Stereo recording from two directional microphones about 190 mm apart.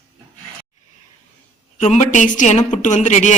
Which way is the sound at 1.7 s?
35° left (ahead or behind).